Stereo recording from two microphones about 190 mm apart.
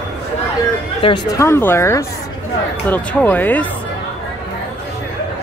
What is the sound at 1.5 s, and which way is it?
Speech, 10° left (ahead or behind).